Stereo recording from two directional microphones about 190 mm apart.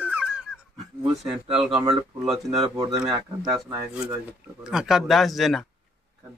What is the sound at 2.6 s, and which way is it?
Speech, 20° right (ahead or behind).